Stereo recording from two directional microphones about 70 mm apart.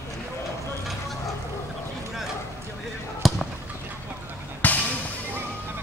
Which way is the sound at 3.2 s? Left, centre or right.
Centre.